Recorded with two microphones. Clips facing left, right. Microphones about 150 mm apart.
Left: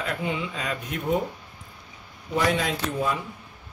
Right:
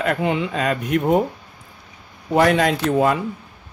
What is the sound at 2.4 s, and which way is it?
Speech, 65° right (ahead or behind).